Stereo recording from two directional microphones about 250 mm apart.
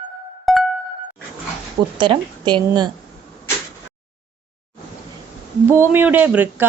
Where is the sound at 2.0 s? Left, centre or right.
Centre.